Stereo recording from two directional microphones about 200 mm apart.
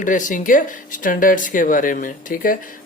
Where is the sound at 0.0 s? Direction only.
40° left (ahead or behind).